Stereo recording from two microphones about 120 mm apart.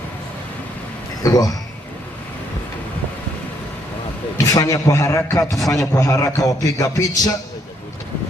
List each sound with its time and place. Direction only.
1.2 s a man's voice: 30° left (ahead or behind)
4.4 s a man's voice: 30° left (ahead or behind)
5.5 s a man's voice: centre (ahead or behind)
5.7 s a man's voice: 30° left (ahead or behind)